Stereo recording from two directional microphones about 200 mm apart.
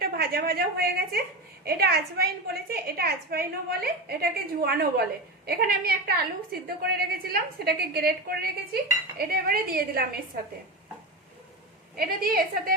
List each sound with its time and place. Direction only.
0.0 s a woman's voice: 50° right (ahead or behind)
11.9 s a woman's voice: 45° right (ahead or behind)